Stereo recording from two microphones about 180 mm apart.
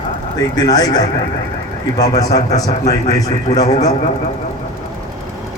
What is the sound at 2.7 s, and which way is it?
A man's voice, 40° left (ahead or behind).